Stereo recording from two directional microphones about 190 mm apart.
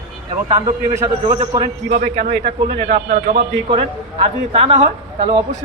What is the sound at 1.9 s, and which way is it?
A man's voice, 40° right (ahead or behind).